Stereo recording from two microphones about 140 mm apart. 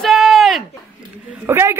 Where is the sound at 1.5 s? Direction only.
20° right (ahead or behind).